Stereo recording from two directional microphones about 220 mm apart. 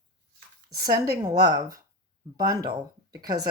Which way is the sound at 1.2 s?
15° right (ahead or behind).